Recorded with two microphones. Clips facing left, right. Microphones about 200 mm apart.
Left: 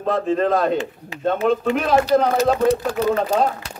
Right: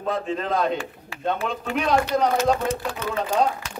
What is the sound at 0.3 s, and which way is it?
A man's voice, 50° left (ahead or behind).